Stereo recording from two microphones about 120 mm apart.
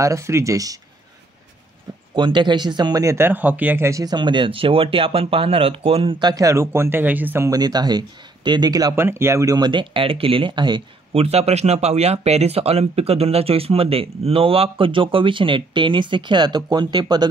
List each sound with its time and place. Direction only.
0.0 s speech: 25° right (ahead or behind)
2.1 s speech: 40° right (ahead or behind); by 7.4 s 15° right (ahead or behind)
7.4 s speech: 30° right (ahead or behind)
8.9 s speech: 20° right (ahead or behind)
9.6 s speech: 40° right (ahead or behind)
11.1 s speech: 60° right (ahead or behind); by 17.3 s 35° right (ahead or behind)